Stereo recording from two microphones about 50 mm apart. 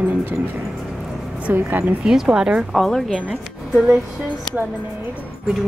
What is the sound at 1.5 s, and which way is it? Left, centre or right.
Speech, right.